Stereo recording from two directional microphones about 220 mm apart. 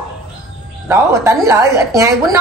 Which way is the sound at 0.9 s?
15° right (ahead or behind).